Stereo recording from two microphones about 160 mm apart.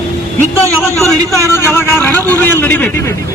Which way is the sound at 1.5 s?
15° left (ahead or behind).